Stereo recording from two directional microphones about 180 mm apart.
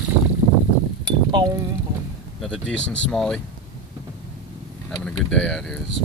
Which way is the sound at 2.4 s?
5° left (ahead or behind).